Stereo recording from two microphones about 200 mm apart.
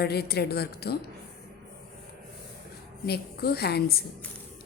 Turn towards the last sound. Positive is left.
turn(degrees=50)  # may be behind; listen again after turning